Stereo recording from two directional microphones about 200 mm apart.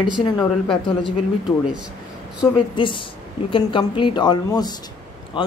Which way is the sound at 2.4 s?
25° left (ahead or behind).